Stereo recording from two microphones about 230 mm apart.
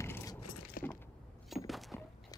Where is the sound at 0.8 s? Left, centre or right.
Left.